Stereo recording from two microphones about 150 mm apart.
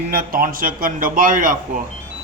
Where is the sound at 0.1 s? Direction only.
70° right (ahead or behind).